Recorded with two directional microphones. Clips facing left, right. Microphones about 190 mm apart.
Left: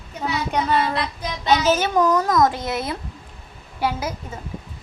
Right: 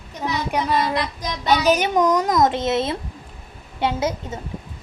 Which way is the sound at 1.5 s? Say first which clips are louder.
Right 1 dB; 15° right (ahead or behind).